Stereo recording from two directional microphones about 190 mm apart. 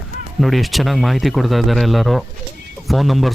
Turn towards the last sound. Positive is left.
turn(degrees=0)  # may be behind; listen again after turning